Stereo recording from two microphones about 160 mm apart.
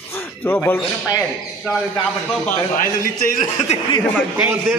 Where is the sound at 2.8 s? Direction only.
55° left (ahead or behind).